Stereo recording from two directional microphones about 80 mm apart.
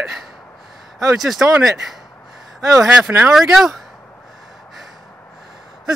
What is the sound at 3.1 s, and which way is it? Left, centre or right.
Speech, right.